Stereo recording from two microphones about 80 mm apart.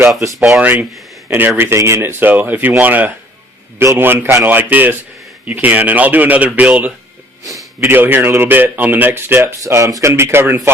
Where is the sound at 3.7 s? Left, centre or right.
Right.